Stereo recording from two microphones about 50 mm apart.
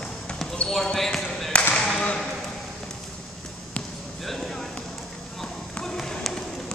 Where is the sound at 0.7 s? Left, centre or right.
Centre.